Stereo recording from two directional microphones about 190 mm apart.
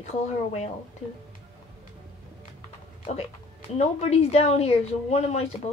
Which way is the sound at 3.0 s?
30° left (ahead or behind).